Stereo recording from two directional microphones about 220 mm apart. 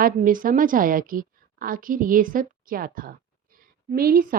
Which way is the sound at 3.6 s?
40° right (ahead or behind).